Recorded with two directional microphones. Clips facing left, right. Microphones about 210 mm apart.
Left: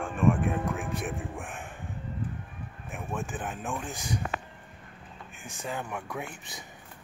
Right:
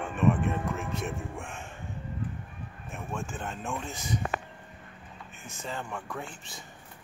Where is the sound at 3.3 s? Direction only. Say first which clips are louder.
Left 1 dB; 5° left (ahead or behind).